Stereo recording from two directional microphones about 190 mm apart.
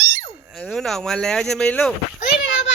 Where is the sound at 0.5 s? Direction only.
Centre (ahead or behind).